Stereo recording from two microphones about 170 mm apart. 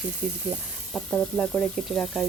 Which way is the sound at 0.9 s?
5° left (ahead or behind).